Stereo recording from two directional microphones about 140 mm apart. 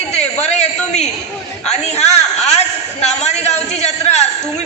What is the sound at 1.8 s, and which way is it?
A man's voice, 50° left (ahead or behind).